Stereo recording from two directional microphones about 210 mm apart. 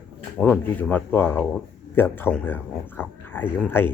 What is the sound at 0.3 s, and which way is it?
A man's voice, 5° left (ahead or behind).